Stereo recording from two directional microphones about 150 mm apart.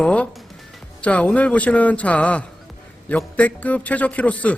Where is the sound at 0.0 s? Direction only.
10° left (ahead or behind).